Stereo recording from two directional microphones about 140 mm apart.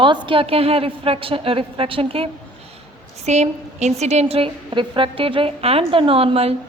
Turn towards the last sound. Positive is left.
turn(degrees=-45)  # may be behind; listen again after turning